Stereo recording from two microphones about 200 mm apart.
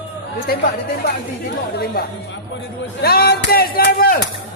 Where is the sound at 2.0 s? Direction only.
50° left (ahead or behind).